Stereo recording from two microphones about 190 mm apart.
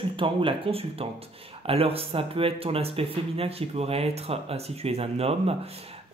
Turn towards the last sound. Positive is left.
turn(degrees=-30)  # may be behind; listen again after turning